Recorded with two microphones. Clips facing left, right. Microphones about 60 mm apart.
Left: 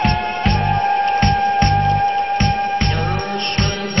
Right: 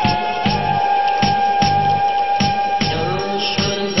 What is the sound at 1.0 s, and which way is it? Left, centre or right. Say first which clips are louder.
Music: right 1 dB; left.